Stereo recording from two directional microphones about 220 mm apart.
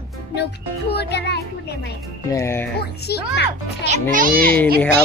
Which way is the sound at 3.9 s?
40° right (ahead or behind).